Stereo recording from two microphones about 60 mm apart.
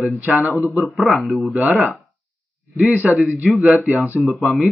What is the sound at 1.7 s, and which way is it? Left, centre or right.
Speech, right.